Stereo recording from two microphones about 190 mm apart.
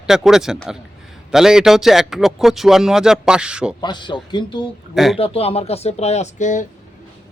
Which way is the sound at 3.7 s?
25° left (ahead or behind).